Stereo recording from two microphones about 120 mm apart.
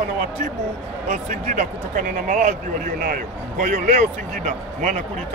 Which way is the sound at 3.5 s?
90° right.